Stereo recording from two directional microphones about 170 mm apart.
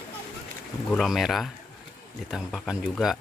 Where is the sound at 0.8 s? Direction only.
Centre (ahead or behind).